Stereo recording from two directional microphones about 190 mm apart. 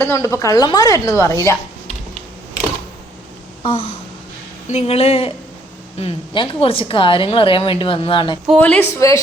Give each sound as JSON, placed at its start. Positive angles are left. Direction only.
{"t": 0.0, "sound": "a woman's voice", "side_deg": 15}
{"t": 3.6, "sound": "a sound", "side_deg": 30}
{"t": 4.7, "sound": "a woman's voice", "side_deg": 30}
{"t": 8.4, "sound": "a woman's voice", "side_deg": 5}